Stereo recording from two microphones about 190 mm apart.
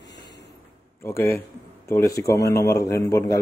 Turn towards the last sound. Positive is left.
turn(degrees=15)  # may be behind; listen again after turning